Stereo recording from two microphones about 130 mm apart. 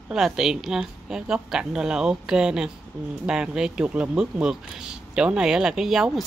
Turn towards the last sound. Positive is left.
turn(degrees=-5)  # may be behind; listen again after turning